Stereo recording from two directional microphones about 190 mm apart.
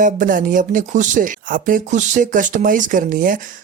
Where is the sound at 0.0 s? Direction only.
45° right (ahead or behind).